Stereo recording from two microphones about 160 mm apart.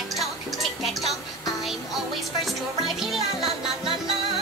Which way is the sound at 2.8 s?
Centre (ahead or behind).